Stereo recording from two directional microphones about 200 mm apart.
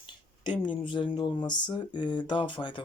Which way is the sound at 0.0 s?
25° left (ahead or behind).